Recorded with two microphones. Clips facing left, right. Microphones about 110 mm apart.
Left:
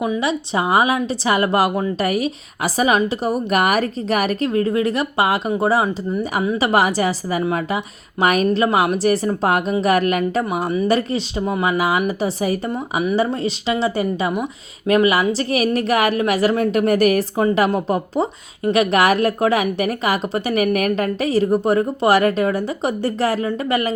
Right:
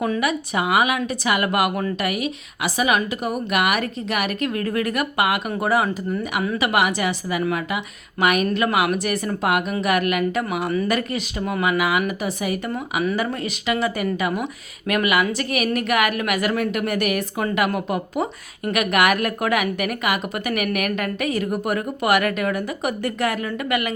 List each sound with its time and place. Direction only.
0.2 s speech: 30° left (ahead or behind)
6.6 s speech: 35° left (ahead or behind)
12.7 s speech: 20° left (ahead or behind)